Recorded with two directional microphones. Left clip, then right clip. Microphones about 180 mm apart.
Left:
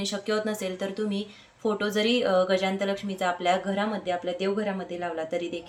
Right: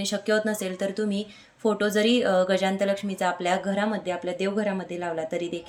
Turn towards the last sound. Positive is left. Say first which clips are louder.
# right 1 dB
turn(degrees=-35)  # may be behind; listen again after turning